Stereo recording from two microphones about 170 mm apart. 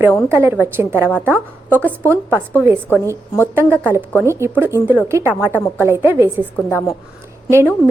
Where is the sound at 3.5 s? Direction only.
10° right (ahead or behind).